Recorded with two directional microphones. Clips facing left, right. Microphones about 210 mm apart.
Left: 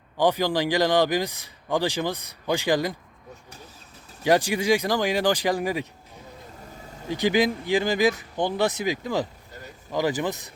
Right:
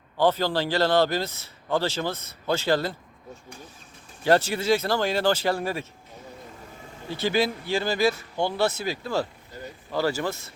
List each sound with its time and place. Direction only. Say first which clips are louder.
0.2 s a man's voice: left 1 dB; 15° left (ahead or behind)
4.2 s a man's voice: even; 15° left (ahead or behind)
7.1 s a man's voice: left 3 dB; 15° left (ahead or behind)